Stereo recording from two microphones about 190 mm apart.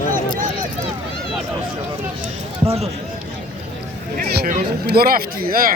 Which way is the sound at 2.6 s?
30° right (ahead or behind).